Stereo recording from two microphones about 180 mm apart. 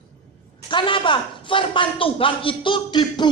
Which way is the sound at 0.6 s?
25° left (ahead or behind).